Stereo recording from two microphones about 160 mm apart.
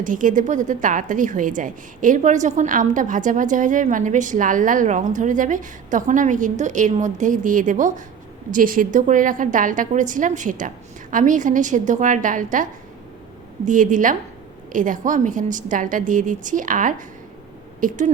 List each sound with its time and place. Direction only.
0.0 s a woman's voice: 55° right (ahead or behind)
13.7 s a woman's voice: 55° right (ahead or behind)